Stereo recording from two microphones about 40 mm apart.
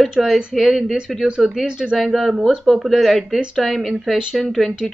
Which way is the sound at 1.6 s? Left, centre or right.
Right.